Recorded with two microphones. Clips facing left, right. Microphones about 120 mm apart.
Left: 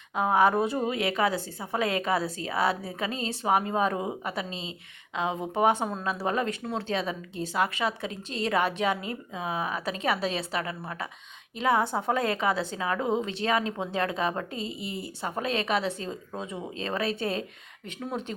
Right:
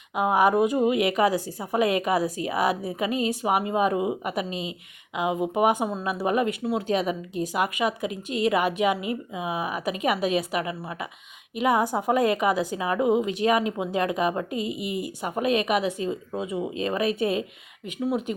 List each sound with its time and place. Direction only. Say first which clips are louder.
0.2 s speech: right 2 dB; 10° right (ahead or behind)